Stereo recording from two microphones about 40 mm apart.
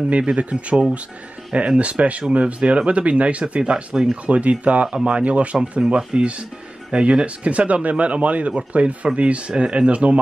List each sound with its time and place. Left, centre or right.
0.2 s speech: right
4.4 s speech: right